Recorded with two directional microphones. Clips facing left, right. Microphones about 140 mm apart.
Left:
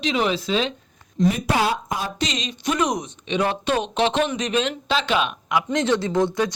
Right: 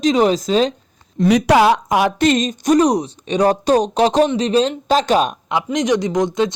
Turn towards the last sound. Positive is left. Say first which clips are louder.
# right 4 dB
turn(degrees=-20)  # may be behind; listen again after turning